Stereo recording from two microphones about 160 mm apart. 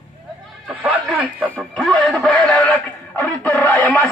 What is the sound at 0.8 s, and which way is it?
Speech, 10° right (ahead or behind).